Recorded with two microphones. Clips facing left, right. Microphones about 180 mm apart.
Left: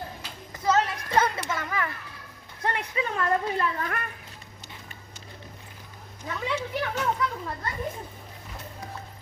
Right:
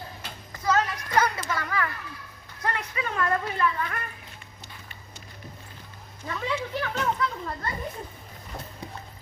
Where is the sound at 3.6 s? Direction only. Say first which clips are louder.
Right 2 dB; 40° left (ahead or behind).